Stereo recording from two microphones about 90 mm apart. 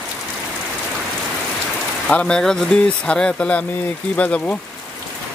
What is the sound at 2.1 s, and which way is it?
Speech, 15° left (ahead or behind).